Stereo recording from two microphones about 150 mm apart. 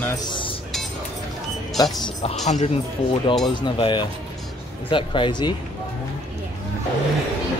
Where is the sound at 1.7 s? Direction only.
25° left (ahead or behind).